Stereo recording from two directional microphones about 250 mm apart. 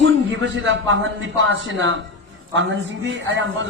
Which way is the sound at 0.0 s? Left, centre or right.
Right.